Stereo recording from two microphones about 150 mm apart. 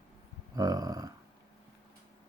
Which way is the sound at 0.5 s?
25° right (ahead or behind).